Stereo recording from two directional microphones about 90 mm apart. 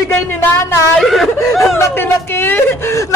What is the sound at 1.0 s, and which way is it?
Snicker, centre (ahead or behind).